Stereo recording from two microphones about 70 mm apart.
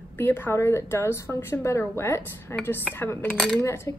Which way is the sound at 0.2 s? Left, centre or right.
Left.